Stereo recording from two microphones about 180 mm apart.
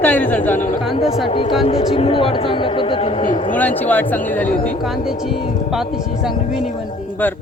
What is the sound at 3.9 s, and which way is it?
Speech, 10° left (ahead or behind).